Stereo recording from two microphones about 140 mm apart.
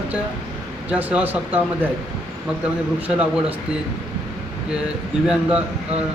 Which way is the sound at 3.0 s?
10° right (ahead or behind).